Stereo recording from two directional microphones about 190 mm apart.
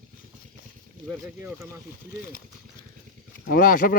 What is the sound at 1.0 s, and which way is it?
Speech, 10° right (ahead or behind).